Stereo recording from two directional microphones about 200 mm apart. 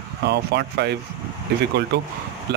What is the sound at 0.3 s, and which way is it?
Speech, 55° right (ahead or behind).